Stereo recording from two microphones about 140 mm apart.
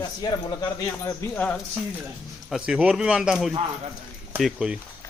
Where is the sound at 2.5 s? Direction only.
5° right (ahead or behind).